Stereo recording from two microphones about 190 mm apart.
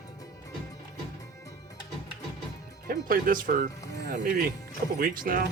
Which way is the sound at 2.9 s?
45° right (ahead or behind).